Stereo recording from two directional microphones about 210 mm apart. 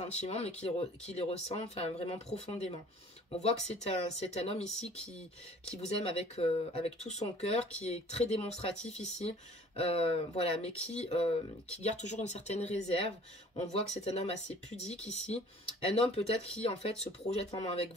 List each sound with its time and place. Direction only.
0.0 s speech: 30° left (ahead or behind)